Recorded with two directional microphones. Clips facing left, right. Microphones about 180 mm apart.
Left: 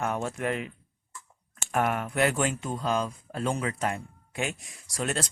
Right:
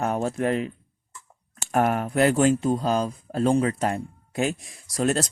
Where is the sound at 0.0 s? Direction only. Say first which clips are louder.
Right 5 dB; 35° right (ahead or behind).